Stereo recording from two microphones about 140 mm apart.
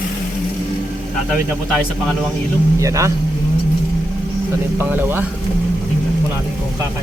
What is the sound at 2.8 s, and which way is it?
Speech, 20° right (ahead or behind).